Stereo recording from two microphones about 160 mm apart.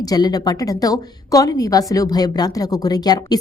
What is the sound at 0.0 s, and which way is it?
A woman's voice, 25° left (ahead or behind).